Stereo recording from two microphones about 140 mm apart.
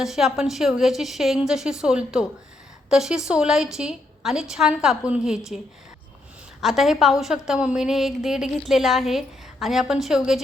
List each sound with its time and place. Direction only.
0.0 s a woman's voice: centre (ahead or behind)
6.6 s a woman's voice: centre (ahead or behind)